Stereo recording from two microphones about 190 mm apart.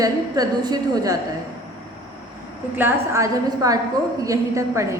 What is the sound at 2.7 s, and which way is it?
A woman's voice, 15° right (ahead or behind).